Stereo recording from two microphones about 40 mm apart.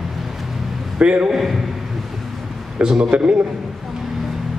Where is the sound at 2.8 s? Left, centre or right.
Centre.